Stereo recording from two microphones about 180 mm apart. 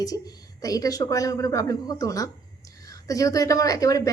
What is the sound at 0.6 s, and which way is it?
Speech, 20° left (ahead or behind).